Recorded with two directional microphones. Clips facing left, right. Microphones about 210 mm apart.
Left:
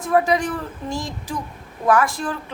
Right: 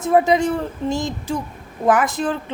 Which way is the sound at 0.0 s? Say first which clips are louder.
Right 3 dB; 25° right (ahead or behind).